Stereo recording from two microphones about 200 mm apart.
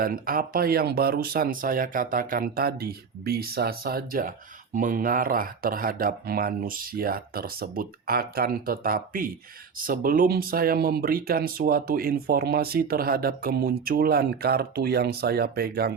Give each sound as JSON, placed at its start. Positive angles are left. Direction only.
{"t": 0.0, "sound": "speech", "side_deg": -45}